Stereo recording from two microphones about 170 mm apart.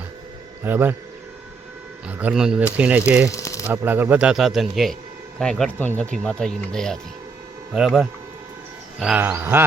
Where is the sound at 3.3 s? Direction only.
20° left (ahead or behind).